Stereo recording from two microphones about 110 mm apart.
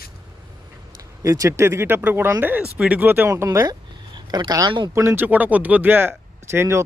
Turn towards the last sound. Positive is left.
turn(degrees=-25)  # may be behind; listen again after turning